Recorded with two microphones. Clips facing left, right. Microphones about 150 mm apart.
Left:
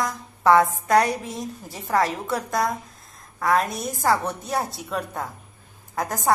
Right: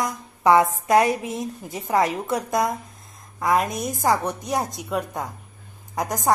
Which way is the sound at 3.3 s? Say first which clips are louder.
Right 1 dB; 15° right (ahead or behind).